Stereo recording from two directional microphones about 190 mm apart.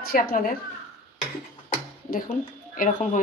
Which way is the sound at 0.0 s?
50° left (ahead or behind).